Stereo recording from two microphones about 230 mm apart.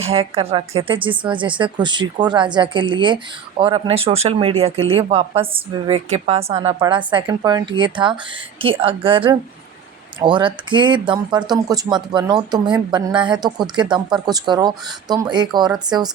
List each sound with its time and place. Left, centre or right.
0.0 s speech: right